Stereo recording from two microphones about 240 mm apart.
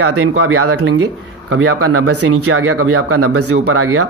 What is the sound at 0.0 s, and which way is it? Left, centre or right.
Speech, right.